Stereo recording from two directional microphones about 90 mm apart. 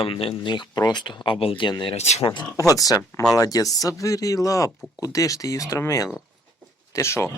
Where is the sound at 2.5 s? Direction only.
40° left (ahead or behind).